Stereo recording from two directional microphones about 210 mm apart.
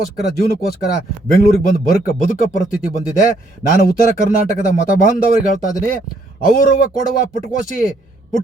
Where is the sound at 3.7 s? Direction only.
45° left (ahead or behind).